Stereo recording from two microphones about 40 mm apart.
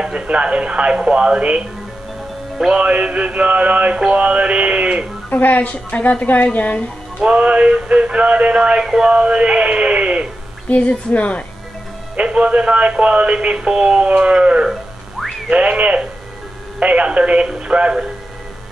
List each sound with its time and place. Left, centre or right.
0.1 s speech: right
2.7 s speech: right
4.1 s mantra: right
5.3 s a woman's voice: left
7.2 s a sound: right
9.1 s speech: right
10.7 s a woman's voice: left
12.2 s speech: right
15.1 s a sound: centre
15.5 s speech: right
17.5 s a sound: right